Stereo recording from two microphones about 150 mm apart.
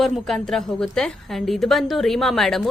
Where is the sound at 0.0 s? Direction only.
Centre (ahead or behind).